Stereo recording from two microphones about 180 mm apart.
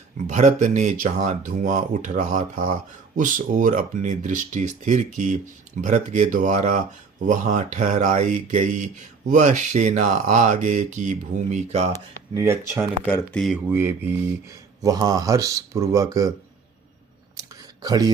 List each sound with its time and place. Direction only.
0.3 s speech: 40° right (ahead or behind)
11.9 s speech: 15° right (ahead or behind)
13.1 s speech: 10° left (ahead or behind)
13.7 s speech: 10° right (ahead or behind)
17.8 s speech: 20° right (ahead or behind)